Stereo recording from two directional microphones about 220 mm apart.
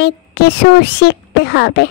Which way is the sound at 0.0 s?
50° left (ahead or behind).